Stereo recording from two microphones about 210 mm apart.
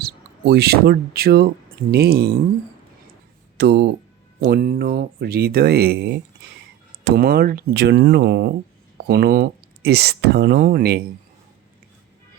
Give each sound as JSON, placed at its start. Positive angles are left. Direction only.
{"t": 0.0, "sound": "speech", "side_deg": -50}
{"t": 3.6, "sound": "speech", "side_deg": -55}